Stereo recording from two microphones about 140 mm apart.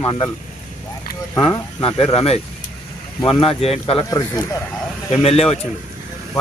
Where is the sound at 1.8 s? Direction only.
45° left (ahead or behind).